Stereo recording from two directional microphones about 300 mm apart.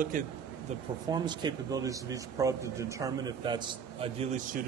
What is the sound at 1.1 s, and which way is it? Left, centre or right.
A man's voice, centre.